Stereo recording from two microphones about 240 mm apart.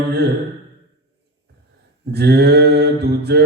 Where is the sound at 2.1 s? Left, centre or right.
Right.